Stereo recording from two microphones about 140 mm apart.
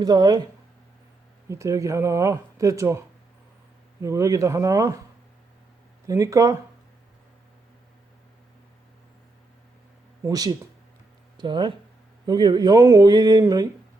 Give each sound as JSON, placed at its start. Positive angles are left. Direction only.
{"t": 0.0, "sound": "speech", "side_deg": -30}
{"t": 1.5, "sound": "speech", "side_deg": -20}
{"t": 4.0, "sound": "speech", "side_deg": -20}
{"t": 6.1, "sound": "speech", "side_deg": -20}
{"t": 10.2, "sound": "speech", "side_deg": -25}